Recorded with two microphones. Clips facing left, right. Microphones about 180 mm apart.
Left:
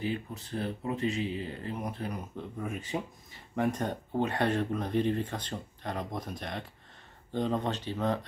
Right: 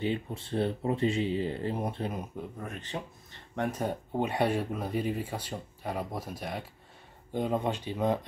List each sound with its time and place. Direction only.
0.0 s speech: 25° right (ahead or behind)
2.6 s speech: 10° left (ahead or behind)
3.5 s speech: centre (ahead or behind)